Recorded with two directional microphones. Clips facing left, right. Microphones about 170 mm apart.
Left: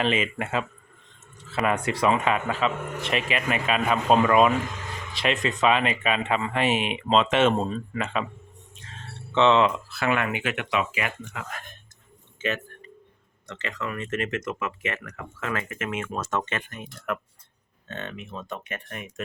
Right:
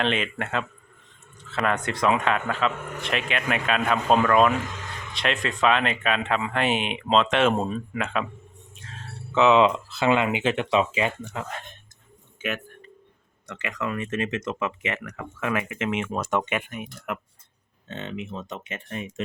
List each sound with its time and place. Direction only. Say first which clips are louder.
0.0 s speech: left 1 dB; 5° left (ahead or behind)
7.5 s speech: even; 10° right (ahead or behind)
8.8 s a sound: right 2 dB; centre (ahead or behind)
9.6 s speech: right 3 dB; 20° right (ahead or behind)
13.5 s speech: right 2 dB; 15° right (ahead or behind)